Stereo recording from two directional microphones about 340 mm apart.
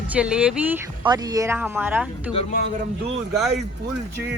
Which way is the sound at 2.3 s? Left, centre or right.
Centre.